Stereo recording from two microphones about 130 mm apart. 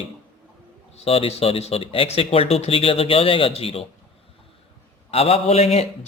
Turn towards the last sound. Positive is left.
turn(degrees=50)  # may be behind; listen again after turning